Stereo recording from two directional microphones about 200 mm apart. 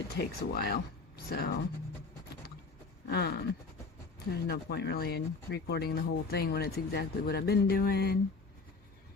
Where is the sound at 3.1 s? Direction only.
55° left (ahead or behind).